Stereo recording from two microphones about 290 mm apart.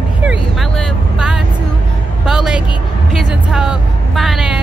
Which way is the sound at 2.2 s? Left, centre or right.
Centre.